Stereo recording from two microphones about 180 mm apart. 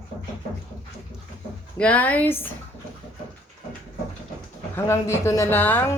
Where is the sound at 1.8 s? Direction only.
5° left (ahead or behind).